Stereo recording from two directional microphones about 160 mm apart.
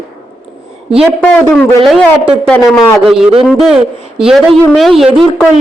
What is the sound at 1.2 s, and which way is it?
Speech, 5° left (ahead or behind).